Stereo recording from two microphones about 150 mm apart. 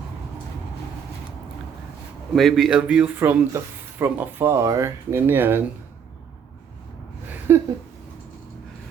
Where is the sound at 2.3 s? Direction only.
Centre (ahead or behind); by 5.6 s 15° right (ahead or behind).